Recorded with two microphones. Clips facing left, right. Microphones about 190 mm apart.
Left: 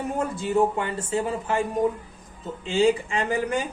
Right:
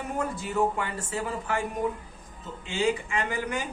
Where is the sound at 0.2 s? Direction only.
25° left (ahead or behind).